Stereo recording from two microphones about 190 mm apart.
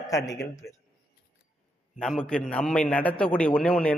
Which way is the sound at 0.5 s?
15° left (ahead or behind).